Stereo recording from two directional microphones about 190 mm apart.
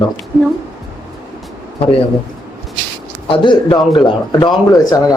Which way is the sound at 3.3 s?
25° left (ahead or behind).